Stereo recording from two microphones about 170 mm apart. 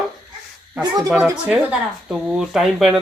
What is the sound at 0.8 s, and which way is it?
Speech, 20° right (ahead or behind).